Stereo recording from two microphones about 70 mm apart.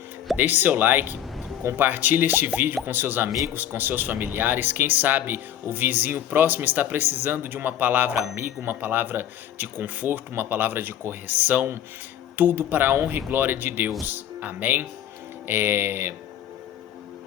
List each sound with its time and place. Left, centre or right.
0.3 s speech: right